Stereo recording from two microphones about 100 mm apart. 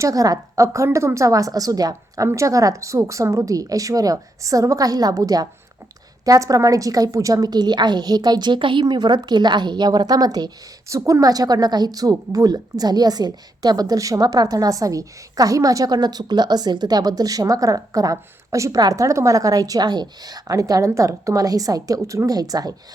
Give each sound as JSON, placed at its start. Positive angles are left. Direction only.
{"t": 0.0, "sound": "a woman's voice", "side_deg": -35}